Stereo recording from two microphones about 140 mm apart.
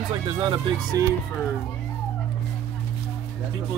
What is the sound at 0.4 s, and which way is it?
Speech, 35° right (ahead or behind).